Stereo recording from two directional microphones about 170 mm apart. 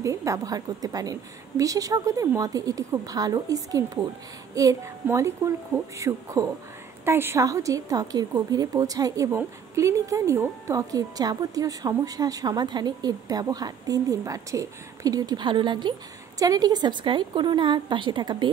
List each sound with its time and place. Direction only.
0.0 s a woman's voice: 20° right (ahead or behind)